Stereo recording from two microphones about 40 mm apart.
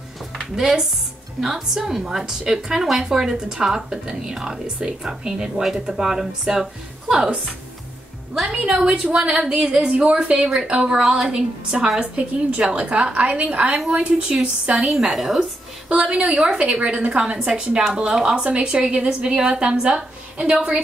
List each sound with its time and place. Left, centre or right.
0.6 s a woman's voice: centre
8.6 s a woman's voice: right
12.0 s a woman's voice: right
15.1 s a woman's voice: centre
15.9 s a woman's voice: right
17.5 s a woman's voice: centre
18.4 s a woman's voice: right